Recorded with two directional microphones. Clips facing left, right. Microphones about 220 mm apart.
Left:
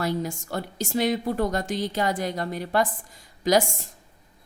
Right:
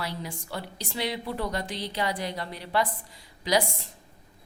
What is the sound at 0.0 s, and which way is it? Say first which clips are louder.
A woman's voice: left 8 dB; 45° left (ahead or behind).